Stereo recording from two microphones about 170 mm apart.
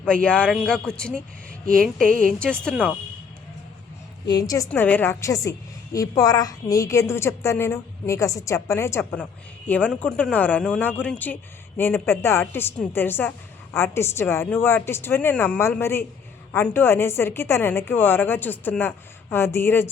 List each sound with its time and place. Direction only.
0.0 s speech: 5° left (ahead or behind)
4.3 s a woman's voice: 25° left (ahead or behind)
4.7 s a woman's voice: 10° left (ahead or behind)